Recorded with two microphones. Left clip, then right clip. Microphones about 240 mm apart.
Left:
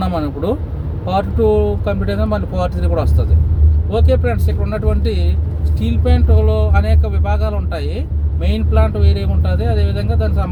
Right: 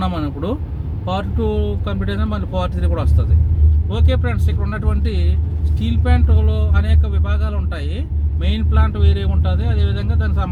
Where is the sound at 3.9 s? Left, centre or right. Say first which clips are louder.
Left 7 dB; left.